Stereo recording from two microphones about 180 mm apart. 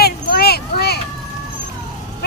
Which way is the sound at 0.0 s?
60° left (ahead or behind).